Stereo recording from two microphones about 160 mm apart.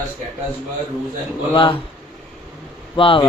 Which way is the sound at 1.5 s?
30° left (ahead or behind).